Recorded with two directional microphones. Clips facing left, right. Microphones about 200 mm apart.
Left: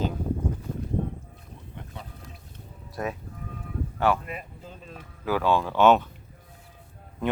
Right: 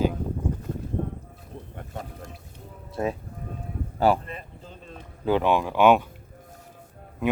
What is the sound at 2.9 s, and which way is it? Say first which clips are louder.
Speech: right 4 dB; 30° right (ahead or behind).